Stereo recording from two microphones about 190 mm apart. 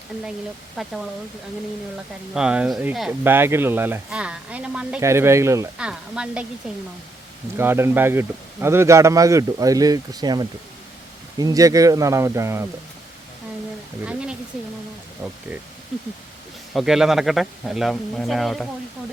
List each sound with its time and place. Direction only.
0.8 s speech: centre (ahead or behind)
2.3 s speech: 5° right (ahead or behind)
5.7 s speech: 5° right (ahead or behind)
7.5 s speech: 10° right (ahead or behind)
14.0 s speech: 5° right (ahead or behind)
16.7 s speech: 5° right (ahead or behind)